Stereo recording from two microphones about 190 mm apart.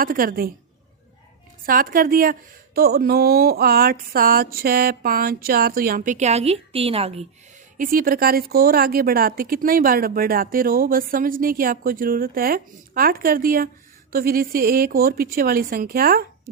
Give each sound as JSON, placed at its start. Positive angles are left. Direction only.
{"t": 0.0, "sound": "speech", "side_deg": -50}
{"t": 1.6, "sound": "speech", "side_deg": -50}
{"t": 7.8, "sound": "speech", "side_deg": -50}